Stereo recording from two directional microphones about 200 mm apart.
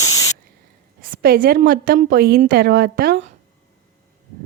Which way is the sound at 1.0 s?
45° right (ahead or behind).